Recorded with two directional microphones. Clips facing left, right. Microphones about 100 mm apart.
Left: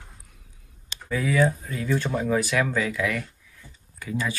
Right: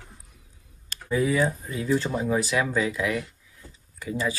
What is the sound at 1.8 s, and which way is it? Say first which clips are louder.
Speech: right 1 dB; 5° right (ahead or behind).